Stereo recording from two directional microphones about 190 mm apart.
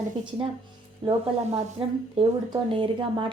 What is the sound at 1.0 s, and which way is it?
Speech, 30° right (ahead or behind).